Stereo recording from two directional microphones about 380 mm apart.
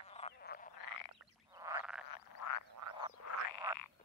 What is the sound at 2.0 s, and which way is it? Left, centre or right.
Frog, left.